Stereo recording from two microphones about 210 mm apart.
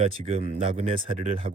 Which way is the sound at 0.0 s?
30° right (ahead or behind).